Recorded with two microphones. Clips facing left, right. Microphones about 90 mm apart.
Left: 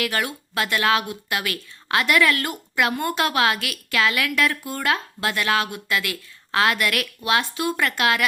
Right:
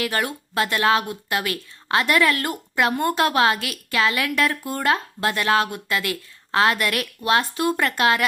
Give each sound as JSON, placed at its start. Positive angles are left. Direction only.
{"t": 0.0, "sound": "speech", "side_deg": -35}